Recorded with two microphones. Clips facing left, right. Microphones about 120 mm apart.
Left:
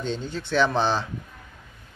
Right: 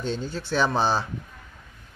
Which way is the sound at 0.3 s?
40° right (ahead or behind).